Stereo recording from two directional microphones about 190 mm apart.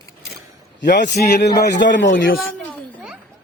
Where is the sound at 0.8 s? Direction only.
65° left (ahead or behind).